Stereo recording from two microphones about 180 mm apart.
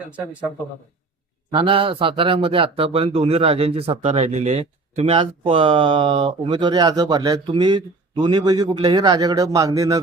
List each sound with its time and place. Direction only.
1.5 s speech: 30° right (ahead or behind)